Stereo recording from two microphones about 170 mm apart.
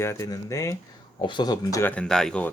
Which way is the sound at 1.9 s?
5° left (ahead or behind).